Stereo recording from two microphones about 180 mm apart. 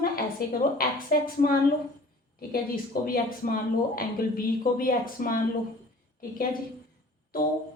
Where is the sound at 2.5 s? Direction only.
55° left (ahead or behind).